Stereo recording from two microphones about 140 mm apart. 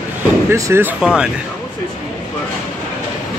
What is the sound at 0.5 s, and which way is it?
Speech, 15° right (ahead or behind).